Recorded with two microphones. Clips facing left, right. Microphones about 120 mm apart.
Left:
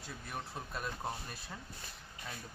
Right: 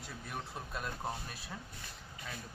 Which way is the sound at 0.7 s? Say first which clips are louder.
Even; centre (ahead or behind).